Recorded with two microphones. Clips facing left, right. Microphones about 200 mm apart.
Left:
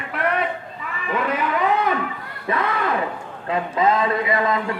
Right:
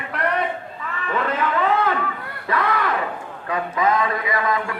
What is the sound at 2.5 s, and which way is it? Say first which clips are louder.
A man's voice: even; 25° left (ahead or behind).